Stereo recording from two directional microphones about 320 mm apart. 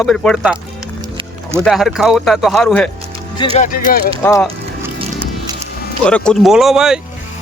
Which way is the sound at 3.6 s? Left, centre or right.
Left.